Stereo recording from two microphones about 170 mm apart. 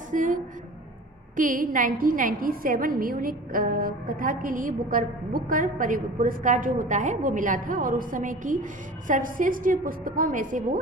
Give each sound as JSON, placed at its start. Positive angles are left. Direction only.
{"t": 0.1, "sound": "a woman's voice", "side_deg": -50}